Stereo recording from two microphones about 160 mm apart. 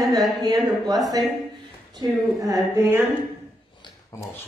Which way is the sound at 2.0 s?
25° right (ahead or behind).